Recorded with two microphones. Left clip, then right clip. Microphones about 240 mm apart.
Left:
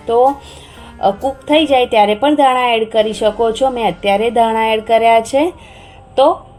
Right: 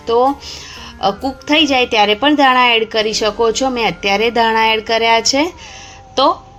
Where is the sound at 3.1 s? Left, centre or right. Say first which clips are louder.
Even; right.